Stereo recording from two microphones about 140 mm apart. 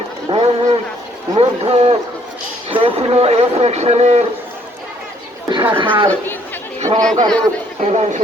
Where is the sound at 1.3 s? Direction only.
45° right (ahead or behind).